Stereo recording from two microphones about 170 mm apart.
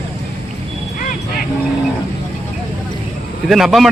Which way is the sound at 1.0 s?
55° left (ahead or behind).